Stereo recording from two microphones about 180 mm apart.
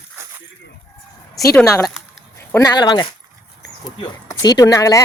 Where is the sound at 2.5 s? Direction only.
20° left (ahead or behind).